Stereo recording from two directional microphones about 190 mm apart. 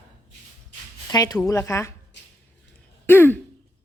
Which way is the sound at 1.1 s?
20° left (ahead or behind).